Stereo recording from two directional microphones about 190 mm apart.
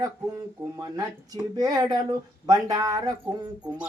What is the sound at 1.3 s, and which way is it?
Speech, 20° right (ahead or behind).